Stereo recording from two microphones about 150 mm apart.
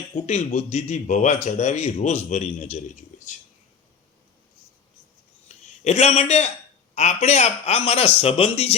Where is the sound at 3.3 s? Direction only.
55° left (ahead or behind).